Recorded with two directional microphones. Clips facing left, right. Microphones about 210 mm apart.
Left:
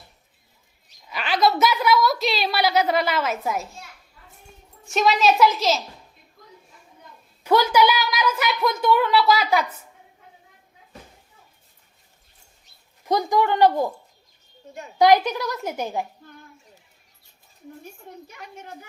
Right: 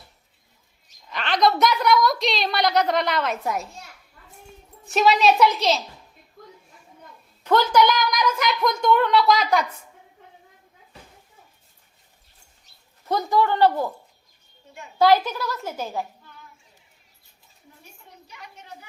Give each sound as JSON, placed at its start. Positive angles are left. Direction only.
{"t": 1.0, "sound": "a sound", "side_deg": 5}
{"t": 4.9, "sound": "a woman's voice", "side_deg": 0}
{"t": 7.4, "sound": "a woman's voice", "side_deg": 10}
{"t": 13.1, "sound": "a woman's voice", "side_deg": 15}
{"t": 14.9, "sound": "a woman's voice", "side_deg": 15}
{"t": 18.0, "sound": "a woman's voice", "side_deg": 50}